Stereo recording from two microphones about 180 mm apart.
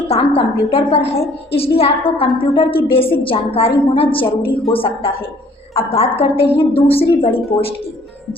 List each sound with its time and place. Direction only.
0.1 s a woman's voice: 30° left (ahead or behind)